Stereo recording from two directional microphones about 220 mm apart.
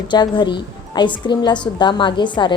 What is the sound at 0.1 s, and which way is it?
A woman's voice, 20° left (ahead or behind).